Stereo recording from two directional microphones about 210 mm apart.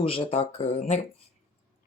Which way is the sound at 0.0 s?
25° left (ahead or behind).